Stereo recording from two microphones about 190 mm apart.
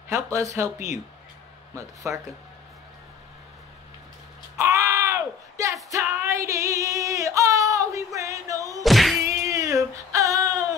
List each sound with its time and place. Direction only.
0.1 s speech: 15° right (ahead or behind)
2.0 s speech: 15° right (ahead or behind)
4.6 s a sound: 15° right (ahead or behind)
5.9 s female singing: 15° right (ahead or behind)
8.8 s thunk: centre (ahead or behind)
9.3 s female singing: 15° right (ahead or behind)